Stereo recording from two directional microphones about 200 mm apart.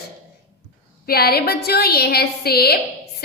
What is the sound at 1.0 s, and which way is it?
A woman's voice, 50° left (ahead or behind).